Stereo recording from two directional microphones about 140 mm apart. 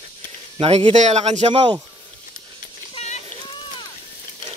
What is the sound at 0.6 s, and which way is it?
Speech, 45° right (ahead or behind).